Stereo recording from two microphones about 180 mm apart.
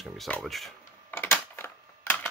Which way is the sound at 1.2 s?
15° left (ahead or behind).